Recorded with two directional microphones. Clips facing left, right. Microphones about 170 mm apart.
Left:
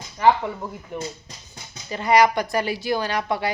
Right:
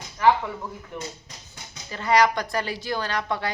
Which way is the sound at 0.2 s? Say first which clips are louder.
Left 2 dB; 25° left (ahead or behind).